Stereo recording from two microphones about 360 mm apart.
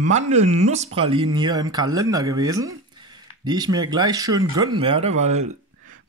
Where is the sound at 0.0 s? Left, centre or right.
Centre.